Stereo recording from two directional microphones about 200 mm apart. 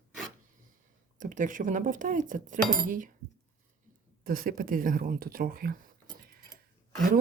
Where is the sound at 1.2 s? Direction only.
40° right (ahead or behind).